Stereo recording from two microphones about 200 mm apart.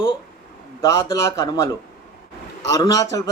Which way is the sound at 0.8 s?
15° left (ahead or behind).